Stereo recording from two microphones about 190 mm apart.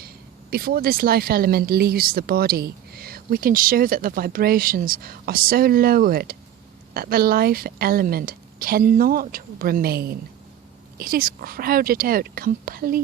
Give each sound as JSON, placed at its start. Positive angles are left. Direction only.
{"t": 0.5, "sound": "speech", "side_deg": -50}